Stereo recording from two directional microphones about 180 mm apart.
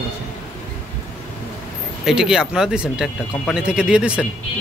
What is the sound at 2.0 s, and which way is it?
Speech, 5° right (ahead or behind).